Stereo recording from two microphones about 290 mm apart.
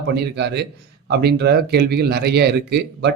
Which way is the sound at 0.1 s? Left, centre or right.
Right.